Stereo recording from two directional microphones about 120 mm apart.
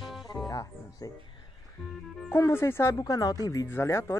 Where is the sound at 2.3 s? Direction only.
20° left (ahead or behind).